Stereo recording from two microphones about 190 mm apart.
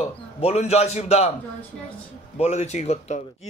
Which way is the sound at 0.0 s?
35° left (ahead or behind).